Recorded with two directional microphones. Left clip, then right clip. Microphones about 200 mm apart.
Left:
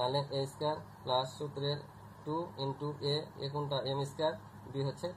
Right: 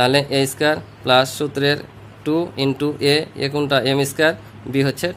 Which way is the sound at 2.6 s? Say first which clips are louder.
Right 18 dB; 55° right (ahead or behind).